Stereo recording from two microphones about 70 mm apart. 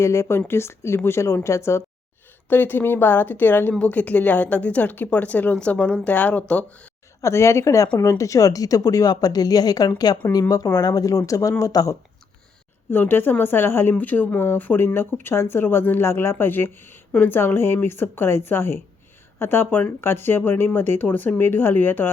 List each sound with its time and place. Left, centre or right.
0.0 s speech: left
2.5 s a woman's voice: left
7.2 s speech: left
10.2 s speech: left
10.8 s speech: left
12.9 s a woman's voice: left